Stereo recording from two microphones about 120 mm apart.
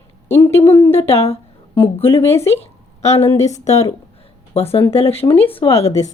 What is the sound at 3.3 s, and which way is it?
Speech, 70° left (ahead or behind).